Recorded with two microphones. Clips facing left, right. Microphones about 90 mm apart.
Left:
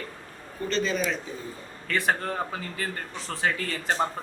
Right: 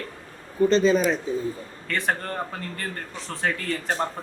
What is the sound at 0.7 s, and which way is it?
Speech, 35° right (ahead or behind).